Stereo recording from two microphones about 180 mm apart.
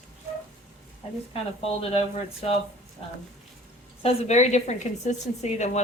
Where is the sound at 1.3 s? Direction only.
35° left (ahead or behind).